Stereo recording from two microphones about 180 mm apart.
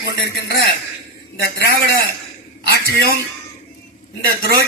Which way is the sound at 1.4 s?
60° left (ahead or behind).